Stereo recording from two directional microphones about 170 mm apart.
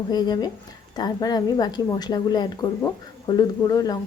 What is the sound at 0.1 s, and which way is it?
A woman's voice, 25° left (ahead or behind).